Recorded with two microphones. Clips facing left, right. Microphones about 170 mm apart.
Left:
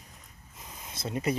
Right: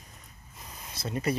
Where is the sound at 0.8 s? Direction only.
25° left (ahead or behind).